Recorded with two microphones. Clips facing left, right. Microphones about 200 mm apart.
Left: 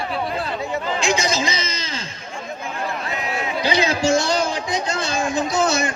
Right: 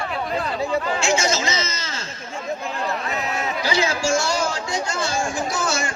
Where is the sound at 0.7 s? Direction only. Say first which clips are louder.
Even; 15° left (ahead or behind).